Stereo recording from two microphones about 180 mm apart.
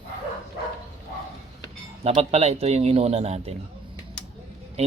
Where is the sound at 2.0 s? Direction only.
35° right (ahead or behind).